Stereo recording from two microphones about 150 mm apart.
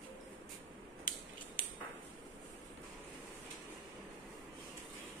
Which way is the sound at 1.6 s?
70° left (ahead or behind).